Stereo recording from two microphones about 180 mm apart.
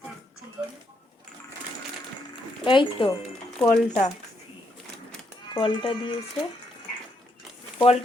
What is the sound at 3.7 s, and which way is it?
Speech, 40° left (ahead or behind).